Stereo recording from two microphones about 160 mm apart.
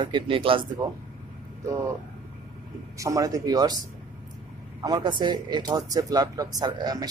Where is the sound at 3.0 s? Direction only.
20° right (ahead or behind).